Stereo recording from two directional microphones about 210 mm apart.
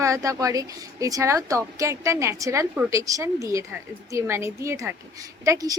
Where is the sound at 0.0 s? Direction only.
15° right (ahead or behind).